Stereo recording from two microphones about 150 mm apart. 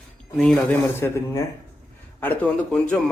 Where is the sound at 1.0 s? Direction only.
15° left (ahead or behind).